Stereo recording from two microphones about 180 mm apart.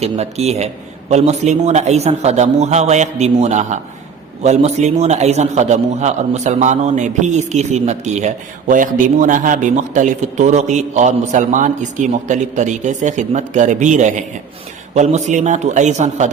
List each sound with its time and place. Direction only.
0.0 s a man's voice: 35° right (ahead or behind)